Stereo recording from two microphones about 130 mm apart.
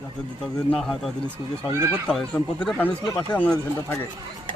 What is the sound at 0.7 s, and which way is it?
Speech, 5° left (ahead or behind).